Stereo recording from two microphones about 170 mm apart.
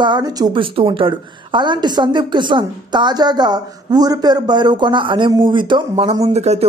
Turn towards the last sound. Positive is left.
turn(degrees=-40)  # may be behind; listen again after turning